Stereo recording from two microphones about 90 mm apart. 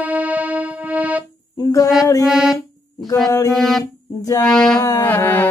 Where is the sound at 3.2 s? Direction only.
40° left (ahead or behind).